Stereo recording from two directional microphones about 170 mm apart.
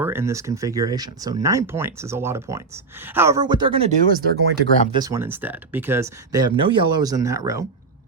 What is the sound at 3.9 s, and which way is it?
Speech, 60° right (ahead or behind).